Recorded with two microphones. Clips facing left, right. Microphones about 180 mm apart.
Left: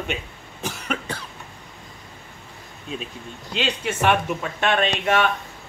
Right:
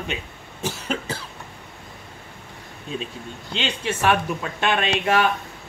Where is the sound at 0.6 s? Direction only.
30° right (ahead or behind).